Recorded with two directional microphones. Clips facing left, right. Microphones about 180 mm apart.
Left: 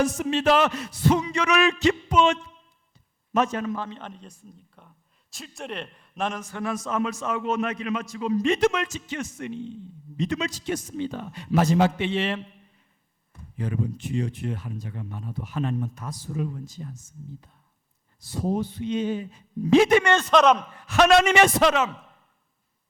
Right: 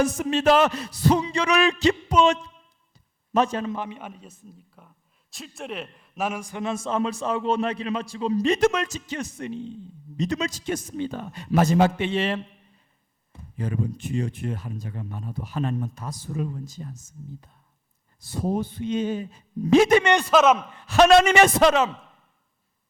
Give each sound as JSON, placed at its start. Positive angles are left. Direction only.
{"t": 0.0, "sound": "a man's voice", "side_deg": -45}
{"t": 3.8, "sound": "a man's voice", "side_deg": -15}
{"t": 13.6, "sound": "a man's voice", "side_deg": -45}
{"t": 18.2, "sound": "a man's voice", "side_deg": -50}
{"t": 20.3, "sound": "a man's voice", "side_deg": -5}
{"t": 20.7, "sound": "a man's voice", "side_deg": -35}